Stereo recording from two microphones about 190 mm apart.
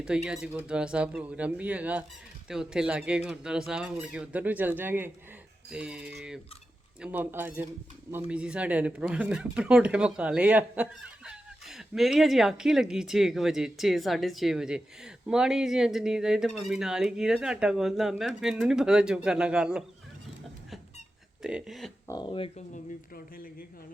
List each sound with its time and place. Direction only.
0.3 s speech: 5° right (ahead or behind)
21.4 s speech: centre (ahead or behind)
22.0 s speech: 20° left (ahead or behind)
22.7 s speech: 50° left (ahead or behind)